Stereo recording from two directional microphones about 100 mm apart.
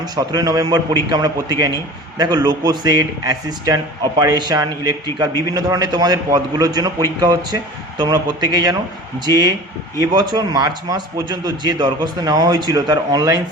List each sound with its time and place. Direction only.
0.0 s a man's voice: 40° right (ahead or behind)